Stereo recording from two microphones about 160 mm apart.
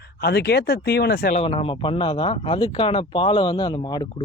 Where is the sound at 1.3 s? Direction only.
35° left (ahead or behind).